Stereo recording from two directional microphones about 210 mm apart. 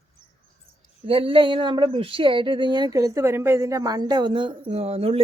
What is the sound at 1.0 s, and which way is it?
Speech, 25° right (ahead or behind).